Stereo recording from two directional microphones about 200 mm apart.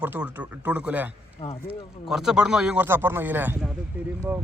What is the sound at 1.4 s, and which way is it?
Speech, 30° left (ahead or behind).